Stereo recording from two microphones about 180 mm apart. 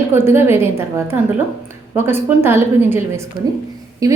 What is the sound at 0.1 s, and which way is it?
A woman's voice, 15° right (ahead or behind).